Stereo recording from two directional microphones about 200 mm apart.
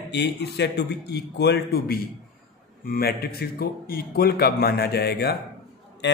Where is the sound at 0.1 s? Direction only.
60° left (ahead or behind).